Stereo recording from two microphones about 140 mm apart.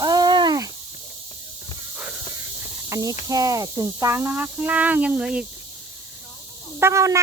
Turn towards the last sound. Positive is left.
turn(degrees=-20)  # may be behind; listen again after turning